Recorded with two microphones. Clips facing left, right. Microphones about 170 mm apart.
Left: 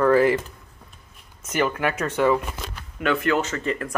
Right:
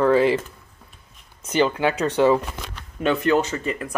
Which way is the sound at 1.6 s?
25° right (ahead or behind).